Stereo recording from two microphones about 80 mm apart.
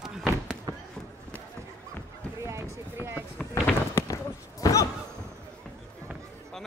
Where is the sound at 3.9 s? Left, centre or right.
Left.